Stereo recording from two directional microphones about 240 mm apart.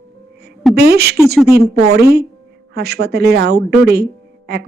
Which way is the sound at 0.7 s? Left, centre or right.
Right.